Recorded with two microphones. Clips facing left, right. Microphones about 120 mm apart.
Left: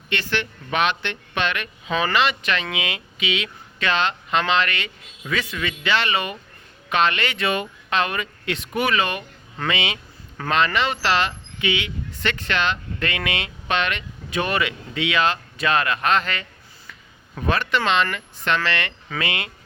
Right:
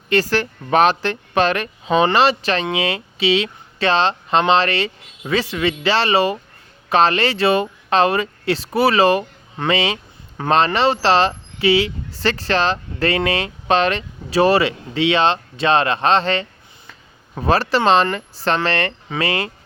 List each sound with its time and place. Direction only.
0.1 s speech: 40° right (ahead or behind)